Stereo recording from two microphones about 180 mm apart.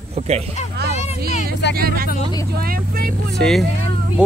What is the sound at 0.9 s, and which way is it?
Speech, 40° left (ahead or behind).